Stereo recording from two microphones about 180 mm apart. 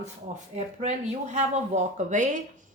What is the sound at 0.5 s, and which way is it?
A woman's voice, 40° right (ahead or behind).